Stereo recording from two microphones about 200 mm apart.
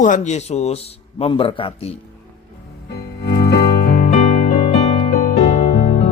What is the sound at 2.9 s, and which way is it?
Music, 55° left (ahead or behind).